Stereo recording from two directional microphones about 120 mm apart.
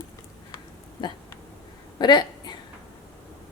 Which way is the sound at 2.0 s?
40° left (ahead or behind).